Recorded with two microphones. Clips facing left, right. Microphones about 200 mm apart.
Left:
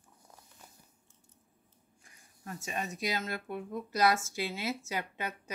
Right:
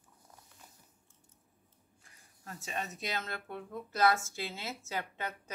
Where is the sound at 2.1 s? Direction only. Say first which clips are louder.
Left 4 dB; 15° left (ahead or behind).